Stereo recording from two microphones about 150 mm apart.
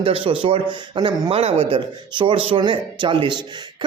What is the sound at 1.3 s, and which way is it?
A man's voice, 40° right (ahead or behind).